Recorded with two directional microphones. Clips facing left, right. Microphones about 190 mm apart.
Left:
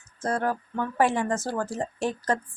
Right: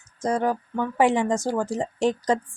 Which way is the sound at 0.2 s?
15° right (ahead or behind).